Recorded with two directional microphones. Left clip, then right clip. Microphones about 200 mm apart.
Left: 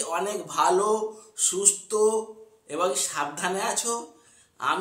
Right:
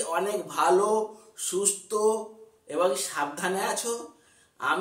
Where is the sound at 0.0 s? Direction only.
10° left (ahead or behind).